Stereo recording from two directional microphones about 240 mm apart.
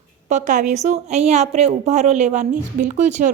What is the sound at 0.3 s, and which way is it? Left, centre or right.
A woman's voice, right.